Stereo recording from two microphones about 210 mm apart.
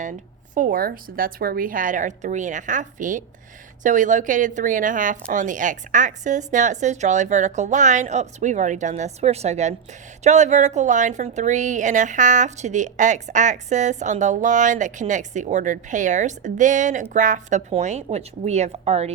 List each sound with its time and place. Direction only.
0.0 s a woman's voice: 40° right (ahead or behind)